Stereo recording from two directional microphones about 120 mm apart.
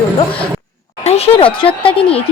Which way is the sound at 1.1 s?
55° left (ahead or behind).